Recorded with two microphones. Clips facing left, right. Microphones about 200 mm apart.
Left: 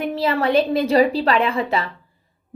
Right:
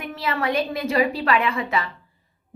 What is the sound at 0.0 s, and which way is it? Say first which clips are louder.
A woman's voice: left 6 dB; 30° left (ahead or behind).